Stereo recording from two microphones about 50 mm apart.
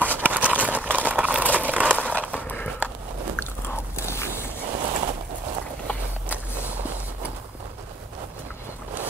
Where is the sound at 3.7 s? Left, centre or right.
Left.